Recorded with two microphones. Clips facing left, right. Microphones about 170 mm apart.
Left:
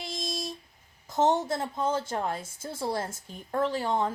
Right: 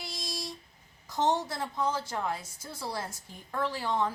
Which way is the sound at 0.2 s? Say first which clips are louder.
Left 5 dB; 25° left (ahead or behind).